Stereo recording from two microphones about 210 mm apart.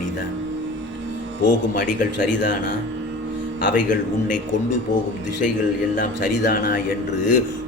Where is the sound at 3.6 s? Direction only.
40° left (ahead or behind).